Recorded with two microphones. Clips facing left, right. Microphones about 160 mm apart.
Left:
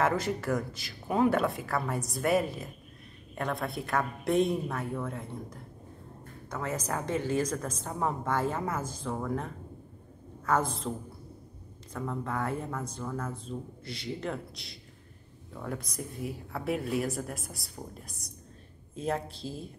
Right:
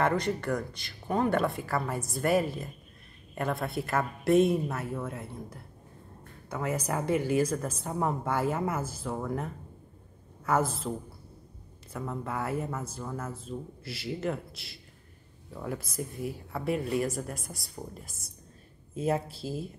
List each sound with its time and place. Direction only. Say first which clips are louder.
0.0 s a woman's voice: right 1 dB; 5° left (ahead or behind)
11.9 s a woman's voice: left 1 dB; 5° right (ahead or behind)